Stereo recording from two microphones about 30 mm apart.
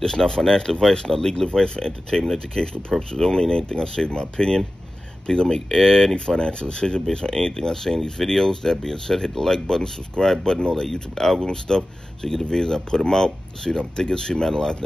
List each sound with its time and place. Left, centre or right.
0.0 s speech: left